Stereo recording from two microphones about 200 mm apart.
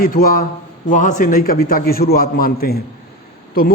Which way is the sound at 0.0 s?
45° left (ahead or behind).